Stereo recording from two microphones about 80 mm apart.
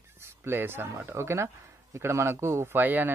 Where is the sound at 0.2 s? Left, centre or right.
Right.